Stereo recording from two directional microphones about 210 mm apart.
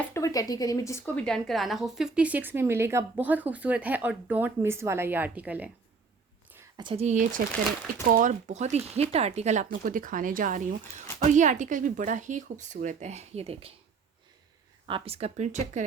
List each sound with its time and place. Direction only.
0.0 s a woman's voice: 15° left (ahead or behind); by 5.7 s 5° right (ahead or behind)
6.5 s a sound: 10° right (ahead or behind)
6.8 s speech: 30° right (ahead or behind)
14.8 s speech: 25° right (ahead or behind)